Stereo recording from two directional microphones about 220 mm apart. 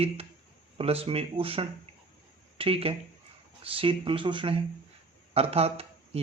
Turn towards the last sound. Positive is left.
turn(degrees=-25)  # may be behind; listen again after turning